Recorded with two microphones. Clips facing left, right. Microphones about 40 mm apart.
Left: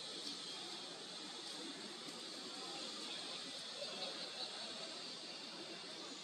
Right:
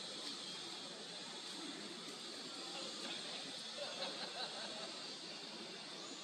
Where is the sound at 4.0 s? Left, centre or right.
Centre.